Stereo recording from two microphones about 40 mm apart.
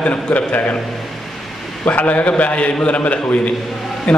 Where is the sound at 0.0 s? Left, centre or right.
Left.